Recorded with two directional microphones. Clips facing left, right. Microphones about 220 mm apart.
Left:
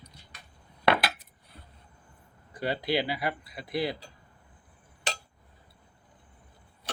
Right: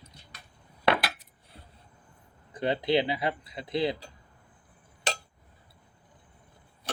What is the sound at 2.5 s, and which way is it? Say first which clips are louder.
Speech: right 3 dB; 20° right (ahead or behind).